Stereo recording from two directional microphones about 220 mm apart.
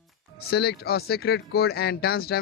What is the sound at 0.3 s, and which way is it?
Speech, 45° left (ahead or behind).